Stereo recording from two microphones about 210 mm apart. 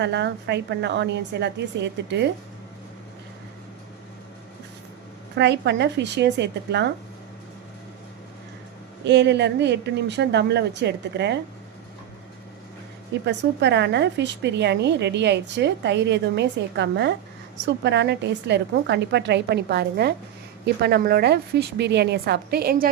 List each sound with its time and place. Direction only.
0.0 s a woman's voice: 55° right (ahead or behind)
5.4 s a woman's voice: 55° right (ahead or behind)
9.0 s a woman's voice: 55° right (ahead or behind)
13.2 s a woman's voice: 55° right (ahead or behind)